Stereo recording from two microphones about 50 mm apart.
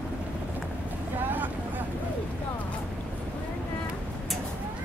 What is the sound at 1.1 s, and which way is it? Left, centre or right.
Vehicle, right.